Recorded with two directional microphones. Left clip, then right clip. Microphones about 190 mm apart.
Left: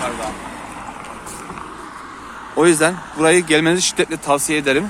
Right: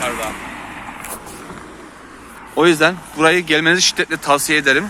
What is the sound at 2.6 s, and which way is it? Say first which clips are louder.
Speech: right 1 dB; centre (ahead or behind).